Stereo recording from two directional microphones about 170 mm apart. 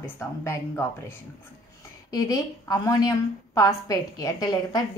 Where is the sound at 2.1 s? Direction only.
20° left (ahead or behind).